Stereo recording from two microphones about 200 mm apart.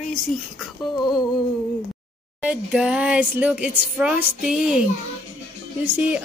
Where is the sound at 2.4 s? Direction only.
5° right (ahead or behind).